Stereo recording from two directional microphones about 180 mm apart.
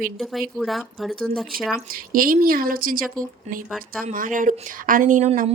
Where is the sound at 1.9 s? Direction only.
50° right (ahead or behind); by 5.5 s 35° right (ahead or behind).